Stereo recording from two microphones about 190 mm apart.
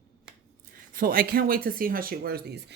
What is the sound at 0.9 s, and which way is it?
Speech, 50° right (ahead or behind).